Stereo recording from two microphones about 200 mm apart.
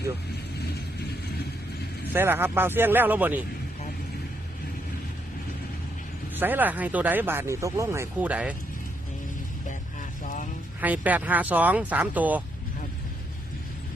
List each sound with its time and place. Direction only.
2.1 s speech: 10° right (ahead or behind)
6.3 s speech: 10° right (ahead or behind)
10.2 s music: 40° left (ahead or behind)
10.8 s speech: 10° right (ahead or behind)